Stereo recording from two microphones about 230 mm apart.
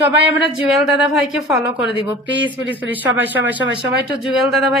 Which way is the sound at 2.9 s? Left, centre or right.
Centre.